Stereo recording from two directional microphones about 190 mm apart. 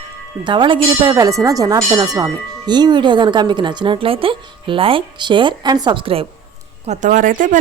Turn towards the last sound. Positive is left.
turn(degrees=-45)  # may be behind; listen again after turning